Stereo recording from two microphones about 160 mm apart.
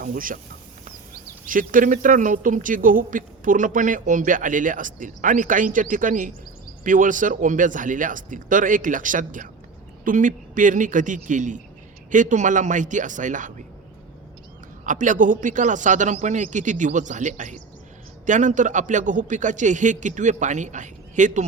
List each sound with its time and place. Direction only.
0.0 s speech: 60° right (ahead or behind)
1.5 s a man's voice: 60° right (ahead or behind)
14.8 s a man's voice: 55° right (ahead or behind)